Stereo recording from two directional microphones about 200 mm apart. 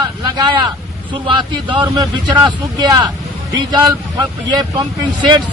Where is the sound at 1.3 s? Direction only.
25° right (ahead or behind).